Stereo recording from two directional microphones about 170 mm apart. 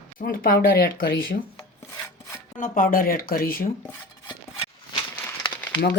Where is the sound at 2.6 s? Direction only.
55° left (ahead or behind).